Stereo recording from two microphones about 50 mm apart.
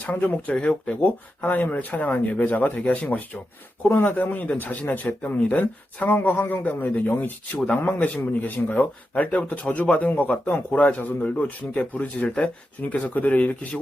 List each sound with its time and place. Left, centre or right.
0.0 s speech: left
0.5 s speech: centre
1.0 s speech: left